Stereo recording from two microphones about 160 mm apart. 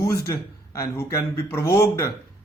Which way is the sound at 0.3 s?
20° left (ahead or behind).